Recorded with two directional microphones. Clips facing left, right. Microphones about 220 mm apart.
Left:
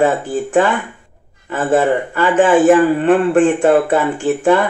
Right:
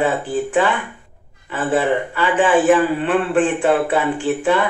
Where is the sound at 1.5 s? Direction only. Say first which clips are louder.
Left 4 dB; 45° left (ahead or behind).